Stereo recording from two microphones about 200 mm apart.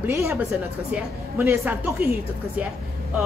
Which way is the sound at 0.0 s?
15° right (ahead or behind).